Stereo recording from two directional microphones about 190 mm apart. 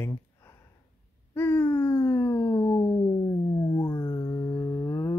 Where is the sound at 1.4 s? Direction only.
10° left (ahead or behind).